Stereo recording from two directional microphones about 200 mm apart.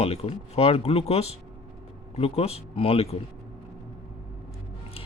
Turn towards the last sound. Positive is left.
turn(degrees=30)  # may be behind; listen again after turning